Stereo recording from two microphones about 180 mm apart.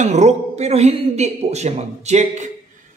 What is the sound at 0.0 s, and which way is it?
Speech, 40° right (ahead or behind).